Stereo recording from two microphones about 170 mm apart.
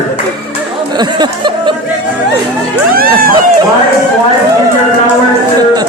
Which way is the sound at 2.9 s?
60° right (ahead or behind).